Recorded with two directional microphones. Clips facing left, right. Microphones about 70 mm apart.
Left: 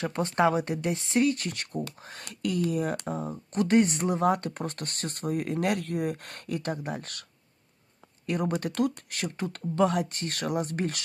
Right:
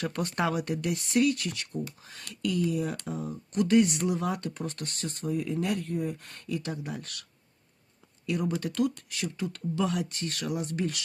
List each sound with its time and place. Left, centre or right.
0.0 s speech: left
8.3 s speech: left